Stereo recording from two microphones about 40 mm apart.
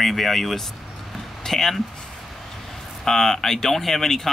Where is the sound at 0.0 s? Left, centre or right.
Centre.